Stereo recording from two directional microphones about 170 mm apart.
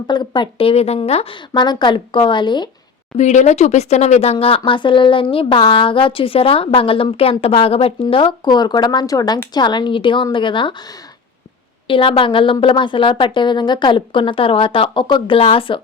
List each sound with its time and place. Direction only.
0.1 s a woman's voice: 25° left (ahead or behind)
3.2 s a woman's voice: 45° left (ahead or behind)
11.9 s a woman's voice: 30° left (ahead or behind)